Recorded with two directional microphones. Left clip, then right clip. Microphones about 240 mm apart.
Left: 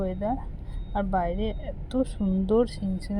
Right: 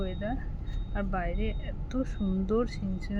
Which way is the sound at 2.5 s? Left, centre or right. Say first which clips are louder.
Left 7 dB; centre.